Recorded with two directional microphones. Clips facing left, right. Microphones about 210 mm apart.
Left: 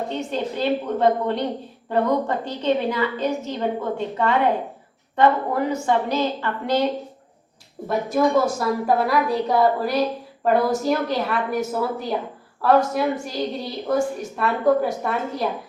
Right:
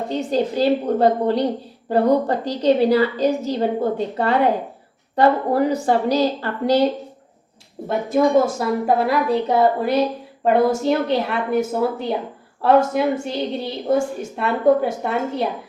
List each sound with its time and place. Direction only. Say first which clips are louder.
0.1 s a woman's voice: right 5 dB; 35° right (ahead or behind)
7.9 s a woman's voice: right 2 dB; 25° right (ahead or behind)